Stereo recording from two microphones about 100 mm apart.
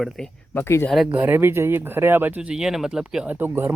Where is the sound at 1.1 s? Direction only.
20° right (ahead or behind); by 3.3 s 5° right (ahead or behind).